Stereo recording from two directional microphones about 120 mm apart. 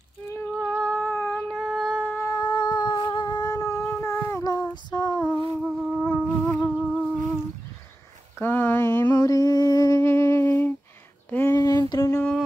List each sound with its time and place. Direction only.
0.3 s lullaby: 15° left (ahead or behind)
0.7 s cat: 10° left (ahead or behind)
1.6 s a sound: 5° left (ahead or behind)
2.1 s humming: 25° left (ahead or behind)
2.4 s humming: 40° left (ahead or behind)
5.6 s wind instrument: 5° left (ahead or behind)
6.0 s music: 15° left (ahead or behind)
8.4 s a sound: 20° left (ahead or behind)
11.5 s a sound: 30° left (ahead or behind)